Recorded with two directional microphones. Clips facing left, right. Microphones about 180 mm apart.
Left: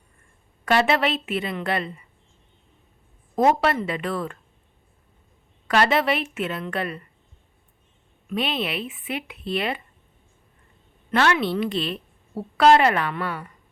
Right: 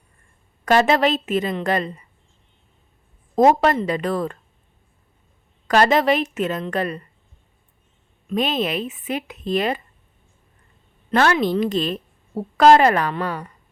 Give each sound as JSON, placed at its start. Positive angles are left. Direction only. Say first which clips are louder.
{"t": 0.6, "sound": "a woman's voice", "louder": "right 4 dB", "side_deg": -40}
{"t": 3.5, "sound": "a woman's voice", "louder": "right 4 dB", "side_deg": -40}
{"t": 5.6, "sound": "a woman's voice", "louder": "right 4 dB", "side_deg": -40}
{"t": 8.3, "sound": "a woman's voice", "louder": "right 4 dB", "side_deg": -40}
{"t": 11.1, "sound": "a woman's voice", "louder": "right 3 dB", "side_deg": -40}